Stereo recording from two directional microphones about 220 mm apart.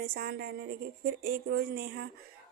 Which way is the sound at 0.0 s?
45° right (ahead or behind).